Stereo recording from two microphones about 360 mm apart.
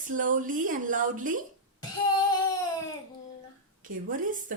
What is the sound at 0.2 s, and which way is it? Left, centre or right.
Speech, right.